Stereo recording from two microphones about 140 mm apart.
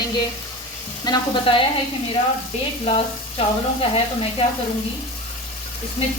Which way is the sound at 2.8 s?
40° left (ahead or behind).